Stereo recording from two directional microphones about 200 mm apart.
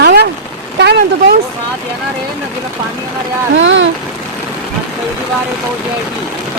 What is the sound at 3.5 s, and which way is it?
Speech, 70° right (ahead or behind).